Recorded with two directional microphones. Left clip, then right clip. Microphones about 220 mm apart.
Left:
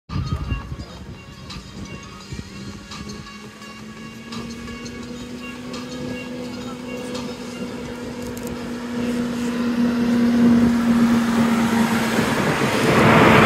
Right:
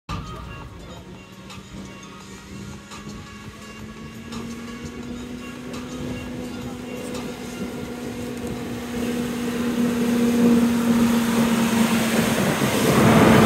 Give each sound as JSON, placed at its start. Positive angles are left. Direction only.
{"t": 9.0, "sound": "vehicle", "side_deg": -40}